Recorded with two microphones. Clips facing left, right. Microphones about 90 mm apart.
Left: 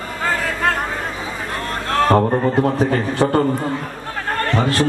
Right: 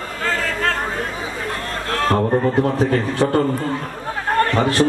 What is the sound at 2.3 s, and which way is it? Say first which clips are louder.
Speech: even; 5° left (ahead or behind).